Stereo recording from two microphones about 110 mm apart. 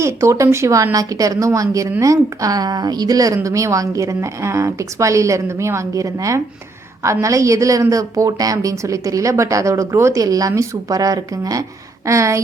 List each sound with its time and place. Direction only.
0.0 s a woman's voice: 30° right (ahead or behind)